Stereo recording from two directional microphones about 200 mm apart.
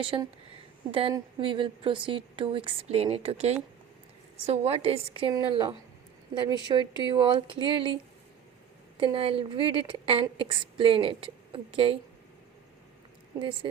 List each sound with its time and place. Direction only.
0.0 s a woman's voice: 25° right (ahead or behind)
9.0 s a woman's voice: 25° right (ahead or behind)